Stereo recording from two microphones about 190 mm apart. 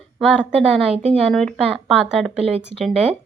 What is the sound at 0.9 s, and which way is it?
Speech, 35° right (ahead or behind).